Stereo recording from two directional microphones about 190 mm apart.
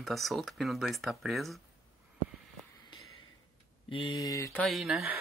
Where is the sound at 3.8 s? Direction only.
25° left (ahead or behind).